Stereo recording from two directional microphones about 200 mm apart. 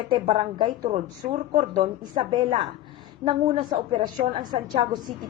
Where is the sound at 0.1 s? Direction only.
25° right (ahead or behind).